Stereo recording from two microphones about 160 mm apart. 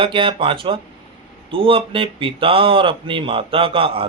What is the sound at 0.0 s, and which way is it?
Speech, 30° right (ahead or behind).